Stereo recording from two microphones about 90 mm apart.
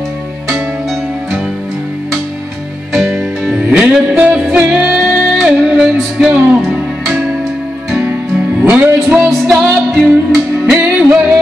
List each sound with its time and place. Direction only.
3.4 s music: 10° right (ahead or behind)
8.6 s music: 20° right (ahead or behind)
9.7 s music: 5° left (ahead or behind)
10.7 s music: 10° right (ahead or behind)